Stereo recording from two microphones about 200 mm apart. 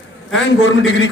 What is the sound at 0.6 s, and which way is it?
Speech, 70° left (ahead or behind).